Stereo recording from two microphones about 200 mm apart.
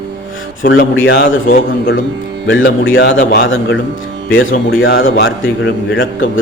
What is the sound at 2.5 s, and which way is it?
Speech, 70° left (ahead or behind).